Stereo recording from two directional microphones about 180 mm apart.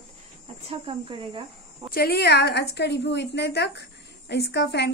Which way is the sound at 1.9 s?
60° left (ahead or behind).